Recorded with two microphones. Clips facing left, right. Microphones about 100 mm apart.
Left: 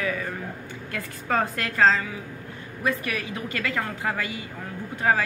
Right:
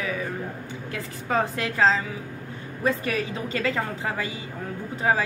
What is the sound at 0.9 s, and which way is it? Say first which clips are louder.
A woman's voice: even; 15° right (ahead or behind).